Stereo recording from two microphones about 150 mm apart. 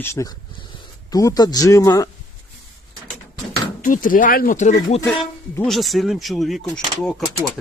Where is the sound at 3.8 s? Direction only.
65° left (ahead or behind).